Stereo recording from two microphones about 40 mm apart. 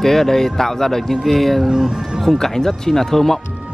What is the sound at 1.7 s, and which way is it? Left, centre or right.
Speech, centre.